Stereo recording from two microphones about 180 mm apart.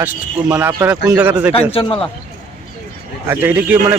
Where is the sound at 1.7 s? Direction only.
30° left (ahead or behind).